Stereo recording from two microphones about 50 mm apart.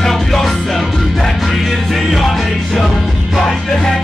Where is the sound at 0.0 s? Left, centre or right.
Centre.